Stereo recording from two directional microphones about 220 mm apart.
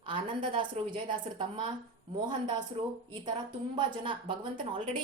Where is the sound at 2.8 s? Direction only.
25° right (ahead or behind).